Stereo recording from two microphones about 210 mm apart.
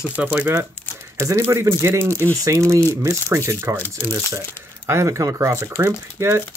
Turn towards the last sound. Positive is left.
turn(degrees=-15)  # may be behind; listen again after turning